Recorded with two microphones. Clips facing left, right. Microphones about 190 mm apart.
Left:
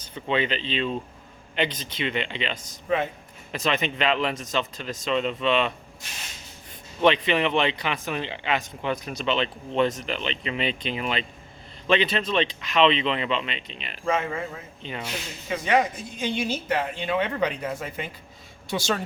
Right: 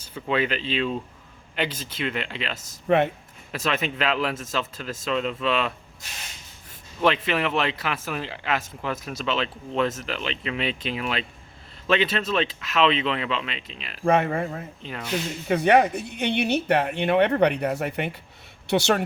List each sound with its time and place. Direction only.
0.1 s speech: 5° right (ahead or behind)
2.8 s speech: 65° right (ahead or behind)
3.5 s speech: 5° right (ahead or behind)
7.0 s speech: 5° right (ahead or behind)
14.0 s speech: 60° right (ahead or behind)
14.3 s speech: 45° right (ahead or behind)
14.8 s speech: centre (ahead or behind)
15.4 s speech: 60° right (ahead or behind)